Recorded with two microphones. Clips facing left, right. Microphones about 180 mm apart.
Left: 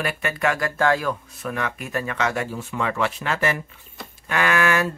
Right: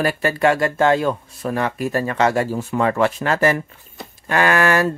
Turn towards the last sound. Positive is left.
turn(degrees=-40)  # may be behind; listen again after turning